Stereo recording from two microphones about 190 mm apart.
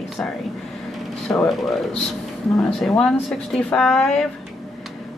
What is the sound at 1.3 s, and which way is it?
Speech, centre (ahead or behind).